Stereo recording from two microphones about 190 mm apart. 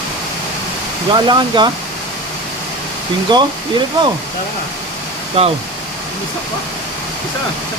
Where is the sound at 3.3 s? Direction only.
20° right (ahead or behind).